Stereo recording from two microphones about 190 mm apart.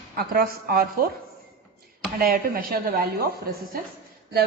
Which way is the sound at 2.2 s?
50° right (ahead or behind).